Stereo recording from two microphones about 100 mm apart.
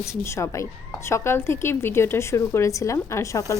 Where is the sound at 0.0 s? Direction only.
30° left (ahead or behind).